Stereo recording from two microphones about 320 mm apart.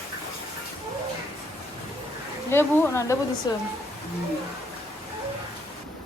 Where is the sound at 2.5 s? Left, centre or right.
Centre.